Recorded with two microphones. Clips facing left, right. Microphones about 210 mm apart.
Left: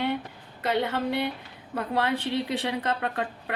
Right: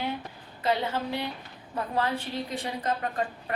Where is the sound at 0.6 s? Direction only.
65° left (ahead or behind).